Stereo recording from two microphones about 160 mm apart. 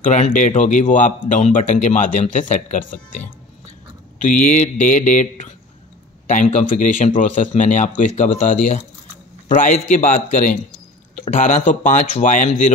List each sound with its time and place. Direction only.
0.0 s speech: 50° left (ahead or behind)